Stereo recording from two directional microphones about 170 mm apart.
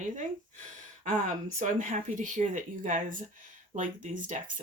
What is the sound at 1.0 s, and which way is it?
Speech, 45° right (ahead or behind).